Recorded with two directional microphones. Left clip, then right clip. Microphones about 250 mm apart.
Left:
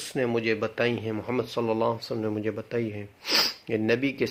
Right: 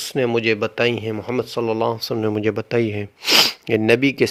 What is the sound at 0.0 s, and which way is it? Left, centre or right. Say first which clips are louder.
Speech: right 8 dB; right.